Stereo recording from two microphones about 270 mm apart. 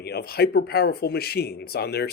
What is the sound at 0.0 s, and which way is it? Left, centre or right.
Speech, left.